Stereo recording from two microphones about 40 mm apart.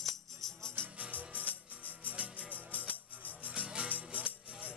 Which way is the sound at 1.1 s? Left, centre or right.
Left.